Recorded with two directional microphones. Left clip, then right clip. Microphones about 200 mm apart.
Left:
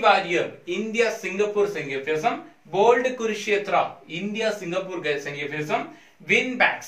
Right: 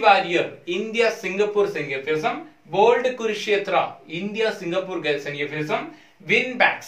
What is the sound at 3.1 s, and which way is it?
Speech, 20° right (ahead or behind).